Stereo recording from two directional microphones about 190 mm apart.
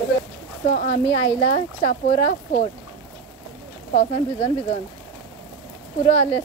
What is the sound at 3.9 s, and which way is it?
Speech, 35° left (ahead or behind).